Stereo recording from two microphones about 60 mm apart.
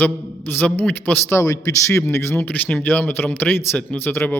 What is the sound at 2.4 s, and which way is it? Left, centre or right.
A man's voice, left.